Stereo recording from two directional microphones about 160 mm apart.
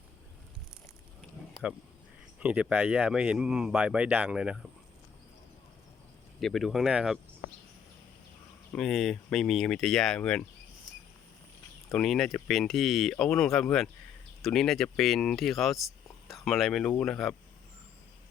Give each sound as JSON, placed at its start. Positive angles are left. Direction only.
{"t": 2.4, "sound": "speech", "side_deg": -10}
{"t": 6.4, "sound": "speech", "side_deg": 0}
{"t": 8.7, "sound": "speech", "side_deg": 0}
{"t": 11.9, "sound": "speech", "side_deg": 0}